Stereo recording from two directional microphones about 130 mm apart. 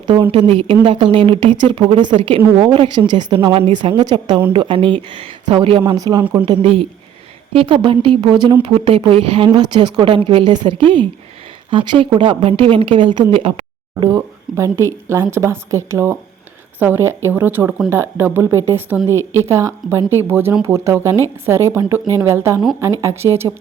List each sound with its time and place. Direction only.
0.1 s speech: 40° right (ahead or behind)
6.0 s a woman's voice: 35° right (ahead or behind)
9.5 s a woman's voice: 35° right (ahead or behind)
14.0 s a woman's voice: 25° right (ahead or behind)
19.2 s speech: 20° left (ahead or behind)
19.5 s a woman's voice: 20° right (ahead or behind)